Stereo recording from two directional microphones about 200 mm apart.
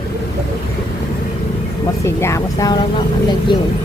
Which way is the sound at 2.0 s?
15° left (ahead or behind).